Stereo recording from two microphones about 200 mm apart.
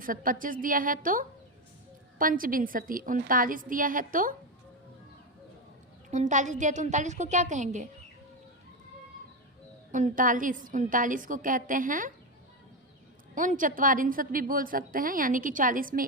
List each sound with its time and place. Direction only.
0.0 s a woman's voice: 45° right (ahead or behind)
6.1 s a woman's voice: 35° right (ahead or behind)
9.9 s a woman's voice: 40° right (ahead or behind)
13.3 s a woman's voice: 40° right (ahead or behind)